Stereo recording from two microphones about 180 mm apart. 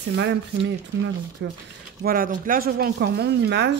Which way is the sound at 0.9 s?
80° right.